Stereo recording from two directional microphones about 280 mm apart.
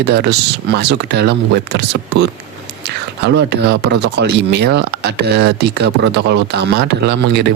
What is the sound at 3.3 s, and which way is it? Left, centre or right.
Speech, right.